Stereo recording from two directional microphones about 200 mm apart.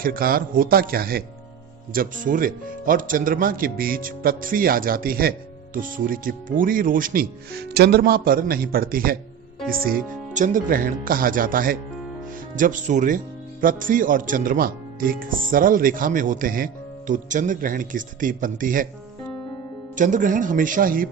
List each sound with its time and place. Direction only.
0.0 s a man's voice: 45° right (ahead or behind)
20.0 s a man's voice: 40° right (ahead or behind)